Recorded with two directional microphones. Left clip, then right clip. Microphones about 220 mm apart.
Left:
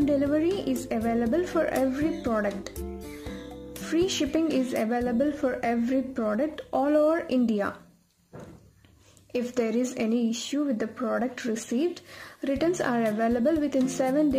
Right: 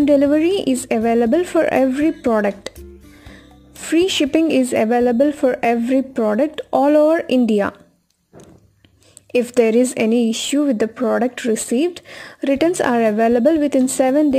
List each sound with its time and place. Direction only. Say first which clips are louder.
0.0 s speech: right 10 dB; 30° right (ahead or behind)
3.8 s speech: right 10 dB; 30° right (ahead or behind)
9.3 s speech: right 13 dB; 30° right (ahead or behind)